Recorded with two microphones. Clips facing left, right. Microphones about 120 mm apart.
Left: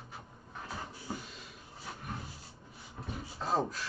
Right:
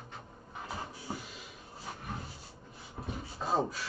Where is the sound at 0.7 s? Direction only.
20° right (ahead or behind).